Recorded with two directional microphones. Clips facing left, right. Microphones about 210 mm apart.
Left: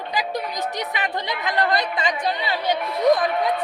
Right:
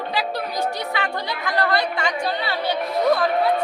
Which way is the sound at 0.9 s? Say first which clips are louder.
Right 1 dB; 20° left (ahead or behind).